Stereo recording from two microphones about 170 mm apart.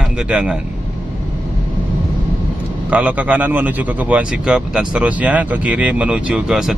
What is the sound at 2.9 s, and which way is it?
Speech, 10° right (ahead or behind).